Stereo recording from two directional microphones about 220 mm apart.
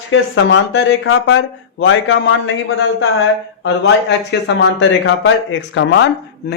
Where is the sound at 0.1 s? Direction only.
60° left (ahead or behind).